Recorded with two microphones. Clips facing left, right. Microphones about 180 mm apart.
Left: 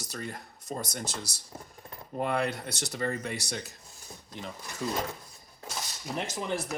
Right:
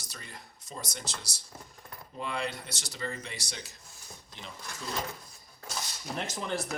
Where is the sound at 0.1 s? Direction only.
55° left (ahead or behind).